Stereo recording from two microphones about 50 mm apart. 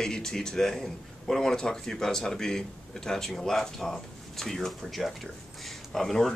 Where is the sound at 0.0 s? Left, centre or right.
Centre.